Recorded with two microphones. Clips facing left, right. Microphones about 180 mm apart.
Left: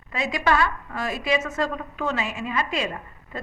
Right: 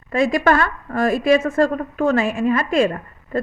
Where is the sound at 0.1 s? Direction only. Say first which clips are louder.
Right 7 dB; 50° right (ahead or behind).